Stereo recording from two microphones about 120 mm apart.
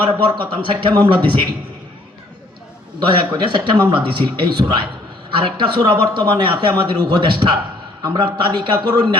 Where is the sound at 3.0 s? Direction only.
40° right (ahead or behind).